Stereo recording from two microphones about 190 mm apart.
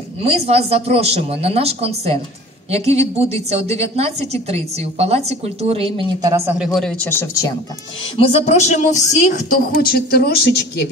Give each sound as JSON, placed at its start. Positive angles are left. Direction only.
{"t": 0.2, "sound": "a woman's voice", "side_deg": -35}
{"t": 6.6, "sound": "speech", "side_deg": 0}
{"t": 8.2, "sound": "speech", "side_deg": 35}